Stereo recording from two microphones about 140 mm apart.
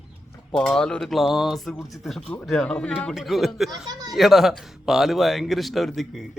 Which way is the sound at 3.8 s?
25° right (ahead or behind).